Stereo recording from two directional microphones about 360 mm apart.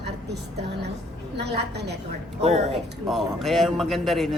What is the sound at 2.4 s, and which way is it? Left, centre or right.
Speech, centre.